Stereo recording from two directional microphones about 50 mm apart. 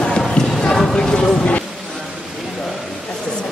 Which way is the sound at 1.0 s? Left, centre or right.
Centre.